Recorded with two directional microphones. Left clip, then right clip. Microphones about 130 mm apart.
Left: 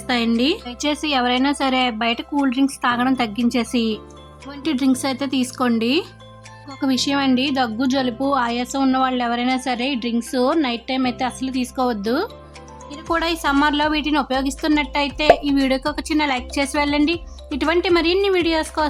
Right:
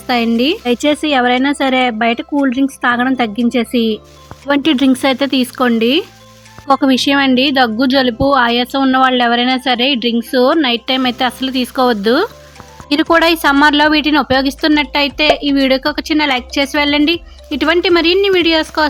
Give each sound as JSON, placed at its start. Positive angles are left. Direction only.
{"t": 0.1, "sound": "speech", "side_deg": -25}
{"t": 12.9, "sound": "speech", "side_deg": -30}